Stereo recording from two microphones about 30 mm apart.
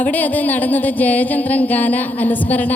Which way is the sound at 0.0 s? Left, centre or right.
Left.